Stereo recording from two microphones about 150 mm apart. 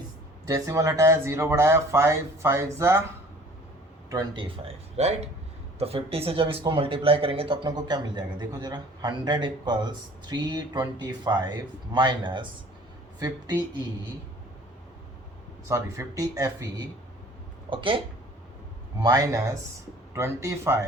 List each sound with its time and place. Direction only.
0.4 s speech: 20° right (ahead or behind)
4.1 s speech: 30° right (ahead or behind)
15.7 s speech: 20° right (ahead or behind)
17.7 s speech: 35° right (ahead or behind)
19.0 s speech: 25° right (ahead or behind)